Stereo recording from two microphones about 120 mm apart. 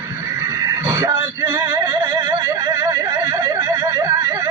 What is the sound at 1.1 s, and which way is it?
Male singing, 20° right (ahead or behind).